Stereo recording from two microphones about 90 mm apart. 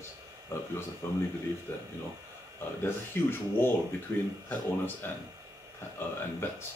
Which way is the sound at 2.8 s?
25° left (ahead or behind).